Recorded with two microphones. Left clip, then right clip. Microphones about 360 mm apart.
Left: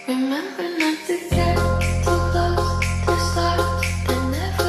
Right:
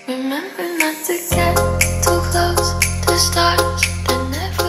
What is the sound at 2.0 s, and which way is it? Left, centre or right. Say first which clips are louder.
Music: right 3 dB; right.